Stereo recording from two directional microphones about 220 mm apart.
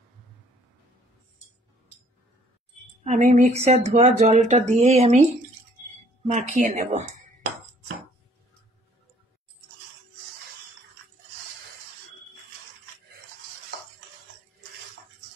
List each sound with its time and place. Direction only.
3.0 s a woman's voice: 30° right (ahead or behind)